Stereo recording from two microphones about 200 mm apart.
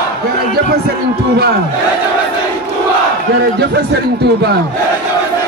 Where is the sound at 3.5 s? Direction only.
55° right (ahead or behind).